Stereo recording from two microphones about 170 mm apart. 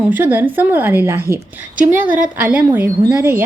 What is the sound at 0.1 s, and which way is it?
A woman's voice, 10° right (ahead or behind).